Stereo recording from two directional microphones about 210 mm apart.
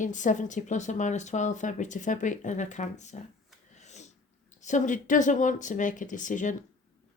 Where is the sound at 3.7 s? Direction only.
35° left (ahead or behind).